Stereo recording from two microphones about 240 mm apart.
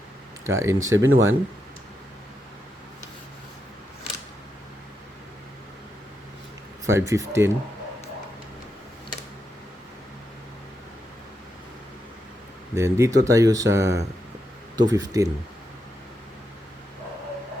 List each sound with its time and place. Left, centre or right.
0.4 s speech: centre
0.9 s speech: right
6.8 s speech: centre
12.7 s speech: centre